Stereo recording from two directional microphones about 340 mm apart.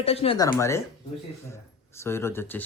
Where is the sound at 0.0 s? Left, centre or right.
Centre.